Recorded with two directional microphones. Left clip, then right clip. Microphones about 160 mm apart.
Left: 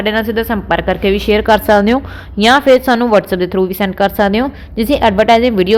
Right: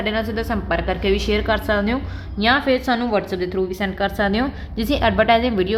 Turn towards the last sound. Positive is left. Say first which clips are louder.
# left 7 dB
turn(degrees=30)  # may be behind; listen again after turning